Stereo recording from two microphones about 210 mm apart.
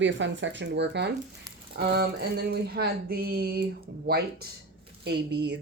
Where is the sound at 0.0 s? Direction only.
60° right (ahead or behind).